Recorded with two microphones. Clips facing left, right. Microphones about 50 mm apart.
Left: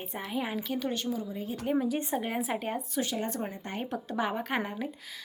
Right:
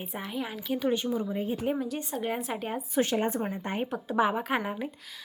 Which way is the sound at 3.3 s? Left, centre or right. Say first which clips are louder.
Right 4 dB; centre.